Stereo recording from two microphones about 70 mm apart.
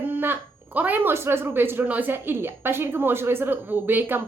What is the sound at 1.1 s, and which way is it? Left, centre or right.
Speech, right.